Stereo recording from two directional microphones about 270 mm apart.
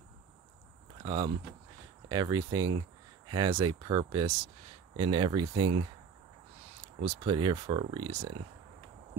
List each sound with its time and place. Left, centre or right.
1.0 s speech: centre
7.0 s speech: centre